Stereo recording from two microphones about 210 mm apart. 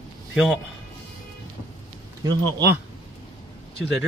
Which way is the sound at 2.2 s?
20° right (ahead or behind).